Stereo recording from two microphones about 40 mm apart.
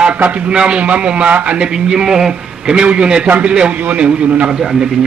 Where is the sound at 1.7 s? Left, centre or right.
Centre.